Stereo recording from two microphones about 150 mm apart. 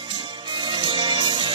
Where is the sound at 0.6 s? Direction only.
30° right (ahead or behind).